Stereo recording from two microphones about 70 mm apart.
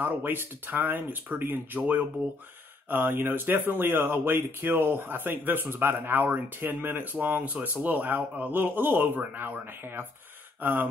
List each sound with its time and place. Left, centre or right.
0.0 s speech: right